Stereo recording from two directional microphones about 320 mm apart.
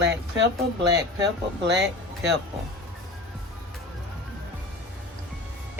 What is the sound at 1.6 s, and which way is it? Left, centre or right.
Speech, right.